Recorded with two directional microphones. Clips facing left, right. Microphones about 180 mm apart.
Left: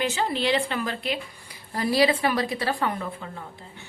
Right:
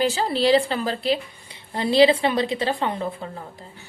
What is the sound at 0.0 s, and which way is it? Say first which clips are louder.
A woman's voice: right 5 dB; 35° right (ahead or behind).